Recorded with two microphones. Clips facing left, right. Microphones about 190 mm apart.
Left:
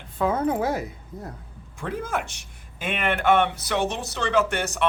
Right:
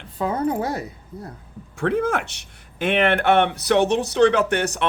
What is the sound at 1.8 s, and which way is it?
Speech, 70° right (ahead or behind).